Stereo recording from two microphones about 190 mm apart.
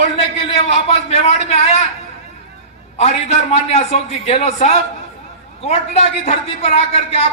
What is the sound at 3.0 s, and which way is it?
A man's voice, 35° left (ahead or behind).